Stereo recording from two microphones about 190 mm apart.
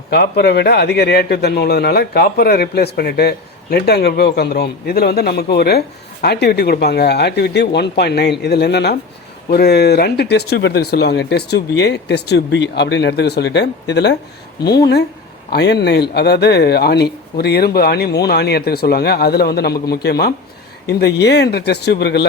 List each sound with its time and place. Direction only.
0.1 s a man's voice: 60° left (ahead or behind)